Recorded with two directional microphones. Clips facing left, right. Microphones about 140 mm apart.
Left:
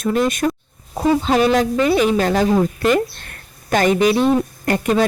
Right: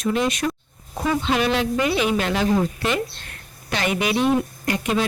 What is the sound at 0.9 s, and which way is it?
A woman's voice, 35° left (ahead or behind).